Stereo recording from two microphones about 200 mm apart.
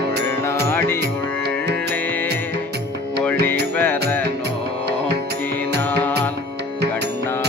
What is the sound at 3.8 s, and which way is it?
Music, 10° left (ahead or behind).